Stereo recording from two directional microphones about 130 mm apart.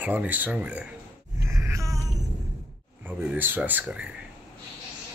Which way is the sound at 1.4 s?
20° right (ahead or behind).